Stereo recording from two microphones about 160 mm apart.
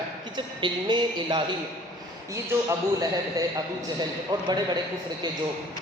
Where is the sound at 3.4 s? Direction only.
20° right (ahead or behind).